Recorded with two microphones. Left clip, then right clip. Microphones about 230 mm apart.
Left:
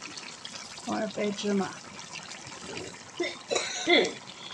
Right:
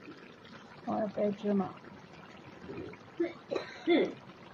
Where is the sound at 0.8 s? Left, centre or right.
Centre.